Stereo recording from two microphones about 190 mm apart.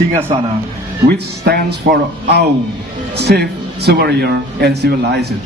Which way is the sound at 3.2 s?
60° right (ahead or behind).